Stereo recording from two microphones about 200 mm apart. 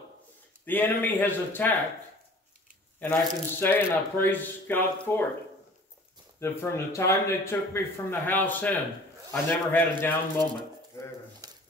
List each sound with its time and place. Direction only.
0.7 s speech: 10° left (ahead or behind)
3.0 s speech: 10° left (ahead or behind)
6.4 s speech: 10° left (ahead or behind)
11.4 s a sound: 15° right (ahead or behind)